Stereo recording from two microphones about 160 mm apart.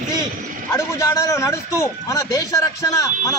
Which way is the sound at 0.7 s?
20° left (ahead or behind).